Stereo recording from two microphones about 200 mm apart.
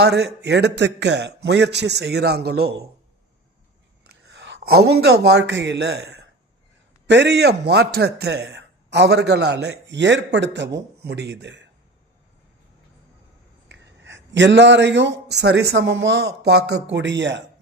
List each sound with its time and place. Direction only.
0.0 s a man's voice: 55° right (ahead or behind)
4.3 s a man's voice: 65° right (ahead or behind)
13.7 s speech: 65° right (ahead or behind)